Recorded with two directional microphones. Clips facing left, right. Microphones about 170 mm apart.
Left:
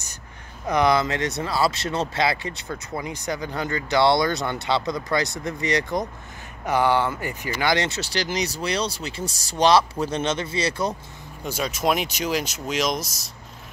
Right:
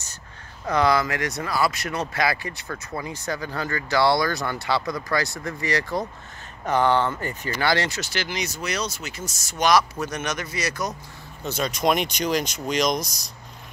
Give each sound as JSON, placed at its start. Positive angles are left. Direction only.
{"t": 0.7, "sound": "speech", "side_deg": 20}
{"t": 11.4, "sound": "speech", "side_deg": 10}